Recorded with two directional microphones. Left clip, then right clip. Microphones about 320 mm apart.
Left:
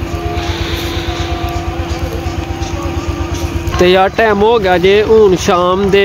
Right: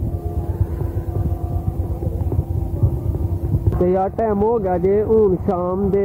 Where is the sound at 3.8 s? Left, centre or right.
Left.